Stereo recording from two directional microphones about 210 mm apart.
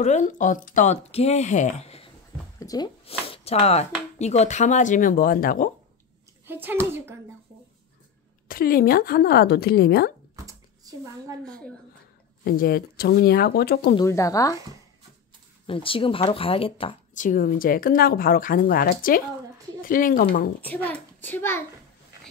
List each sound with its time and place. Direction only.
0.0 s speech: 35° left (ahead or behind)
2.6 s speech: 20° left (ahead or behind); by 5.7 s 40° left (ahead or behind)
6.4 s a child's voice: 10° right (ahead or behind)
8.5 s speech: 45° left (ahead or behind)
10.3 s typewriter: 15° right (ahead or behind)
11.4 s a woman's voice: 5° left (ahead or behind)
12.4 s speech: 45° left (ahead or behind)
13.9 s a child's voice: 15° left (ahead or behind)
15.6 s speech: 25° left (ahead or behind); by 20.5 s 45° left (ahead or behind)
20.6 s a child's voice: 10° left (ahead or behind)